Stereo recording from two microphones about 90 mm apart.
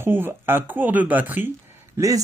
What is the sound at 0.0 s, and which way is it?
Speech, 25° right (ahead or behind).